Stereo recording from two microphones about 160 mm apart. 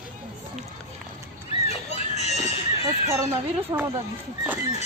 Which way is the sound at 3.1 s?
15° right (ahead or behind).